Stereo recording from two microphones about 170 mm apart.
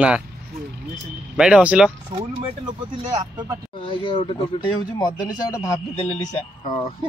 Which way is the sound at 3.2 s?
25° right (ahead or behind).